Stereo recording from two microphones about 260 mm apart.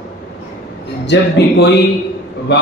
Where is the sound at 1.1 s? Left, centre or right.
Left.